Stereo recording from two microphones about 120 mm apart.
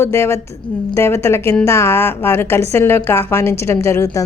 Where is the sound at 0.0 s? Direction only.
20° left (ahead or behind).